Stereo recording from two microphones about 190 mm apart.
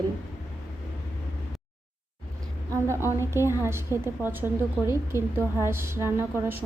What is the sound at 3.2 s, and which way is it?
A woman's voice, 15° right (ahead or behind).